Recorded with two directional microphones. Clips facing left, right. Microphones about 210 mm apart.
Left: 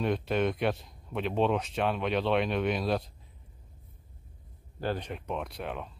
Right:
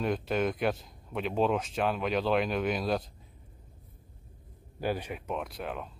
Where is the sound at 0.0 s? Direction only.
Centre (ahead or behind).